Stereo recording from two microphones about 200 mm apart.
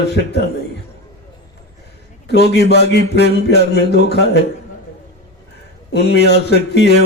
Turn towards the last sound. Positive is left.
turn(degrees=55)  # may be behind; listen again after turning